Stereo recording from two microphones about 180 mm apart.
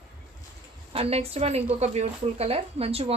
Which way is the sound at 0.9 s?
35° right (ahead or behind).